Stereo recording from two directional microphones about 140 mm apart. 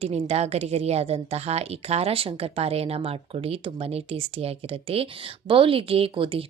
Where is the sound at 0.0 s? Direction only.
50° right (ahead or behind).